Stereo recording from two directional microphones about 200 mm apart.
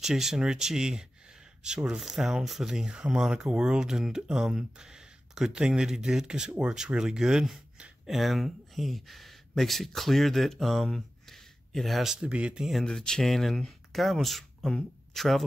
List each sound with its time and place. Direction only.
0.0 s speech: centre (ahead or behind)